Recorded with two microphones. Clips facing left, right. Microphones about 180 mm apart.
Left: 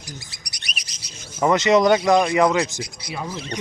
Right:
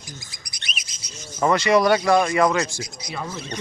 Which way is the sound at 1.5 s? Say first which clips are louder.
Left 2 dB; 20° left (ahead or behind).